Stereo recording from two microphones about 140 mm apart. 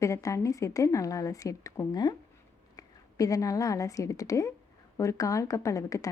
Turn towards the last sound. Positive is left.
turn(degrees=25)  # may be behind; listen again after turning